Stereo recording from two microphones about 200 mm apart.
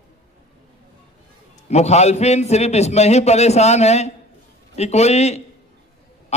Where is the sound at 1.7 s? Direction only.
35° left (ahead or behind).